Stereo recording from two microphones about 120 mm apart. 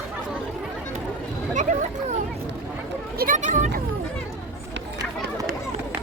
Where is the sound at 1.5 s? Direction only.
90° right.